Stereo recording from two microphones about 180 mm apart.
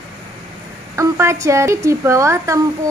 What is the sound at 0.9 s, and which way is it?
Speech, 15° right (ahead or behind).